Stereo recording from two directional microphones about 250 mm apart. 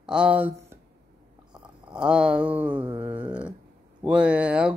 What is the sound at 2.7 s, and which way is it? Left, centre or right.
Mantra, right.